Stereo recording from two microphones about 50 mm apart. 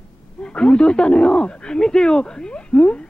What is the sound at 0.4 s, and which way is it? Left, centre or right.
Speech, centre.